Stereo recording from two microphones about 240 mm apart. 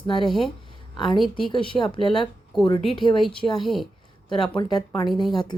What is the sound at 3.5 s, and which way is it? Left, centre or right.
Speech, centre.